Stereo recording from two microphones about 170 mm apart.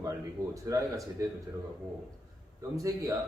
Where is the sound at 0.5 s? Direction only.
20° right (ahead or behind).